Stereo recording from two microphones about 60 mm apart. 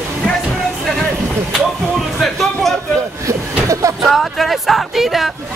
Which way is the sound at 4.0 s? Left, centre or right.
Centre.